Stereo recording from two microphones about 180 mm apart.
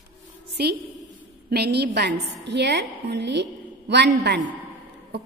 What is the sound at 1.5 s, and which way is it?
A woman's voice, 65° right (ahead or behind).